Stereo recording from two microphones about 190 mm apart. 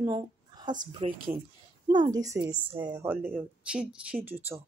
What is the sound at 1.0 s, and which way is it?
Speech, 50° right (ahead or behind).